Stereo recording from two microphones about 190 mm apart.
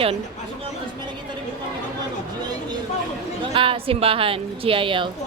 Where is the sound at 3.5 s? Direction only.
30° right (ahead or behind).